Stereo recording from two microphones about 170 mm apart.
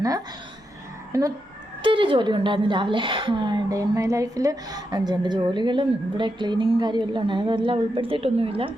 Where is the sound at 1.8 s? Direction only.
30° right (ahead or behind).